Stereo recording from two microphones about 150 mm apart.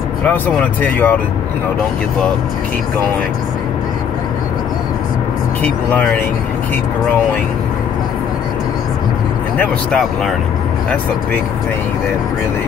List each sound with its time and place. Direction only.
0.2 s speech: 10° left (ahead or behind)
5.6 s speech: 10° left (ahead or behind)
9.6 s speech: 5° left (ahead or behind)